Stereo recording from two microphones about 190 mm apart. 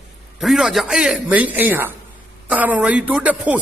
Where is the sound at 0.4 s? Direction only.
Centre (ahead or behind).